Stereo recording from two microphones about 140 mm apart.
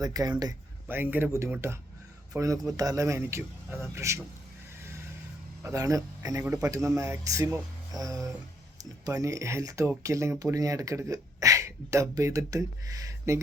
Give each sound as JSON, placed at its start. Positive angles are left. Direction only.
{"t": 0.0, "sound": "speech", "side_deg": -25}
{"t": 0.9, "sound": "speech", "side_deg": -15}
{"t": 5.6, "sound": "speech", "side_deg": -25}